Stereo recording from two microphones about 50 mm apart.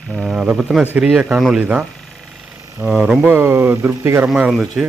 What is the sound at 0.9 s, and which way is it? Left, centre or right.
Speech, centre.